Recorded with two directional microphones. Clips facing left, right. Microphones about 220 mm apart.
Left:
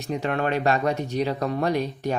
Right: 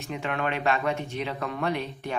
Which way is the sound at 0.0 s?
40° left (ahead or behind).